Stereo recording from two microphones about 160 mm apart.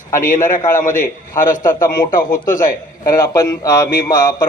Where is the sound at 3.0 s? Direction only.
20° left (ahead or behind).